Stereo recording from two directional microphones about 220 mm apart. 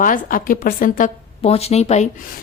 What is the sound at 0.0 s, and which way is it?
A woman's voice, 40° left (ahead or behind).